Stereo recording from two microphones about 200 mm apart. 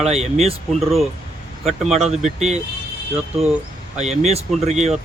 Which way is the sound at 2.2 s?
35° right (ahead or behind).